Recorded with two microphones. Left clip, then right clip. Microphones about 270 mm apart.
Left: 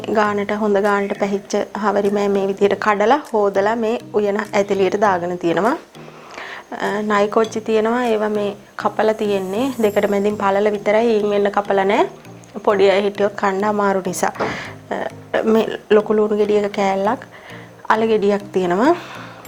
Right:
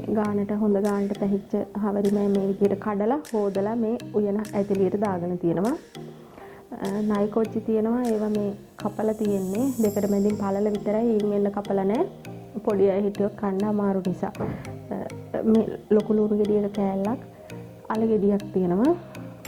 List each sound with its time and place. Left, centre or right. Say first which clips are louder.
0.0 s speech: left 9 dB; centre